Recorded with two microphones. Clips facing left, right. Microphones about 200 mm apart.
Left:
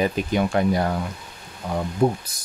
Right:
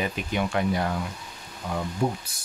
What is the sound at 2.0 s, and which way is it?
Speech, 35° left (ahead or behind).